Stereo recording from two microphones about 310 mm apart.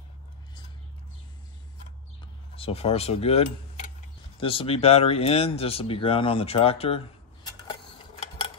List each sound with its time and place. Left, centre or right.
2.5 s speech: centre